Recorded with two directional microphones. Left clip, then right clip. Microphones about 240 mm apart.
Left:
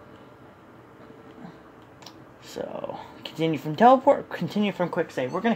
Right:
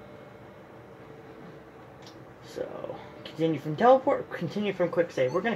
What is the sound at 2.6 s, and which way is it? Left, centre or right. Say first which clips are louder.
Speech: left 3 dB; left.